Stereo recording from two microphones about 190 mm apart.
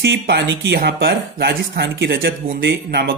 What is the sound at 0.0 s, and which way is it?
Speech, 70° right (ahead or behind).